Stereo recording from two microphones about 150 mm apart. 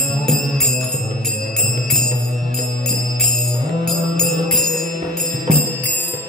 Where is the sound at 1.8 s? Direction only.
5° left (ahead or behind).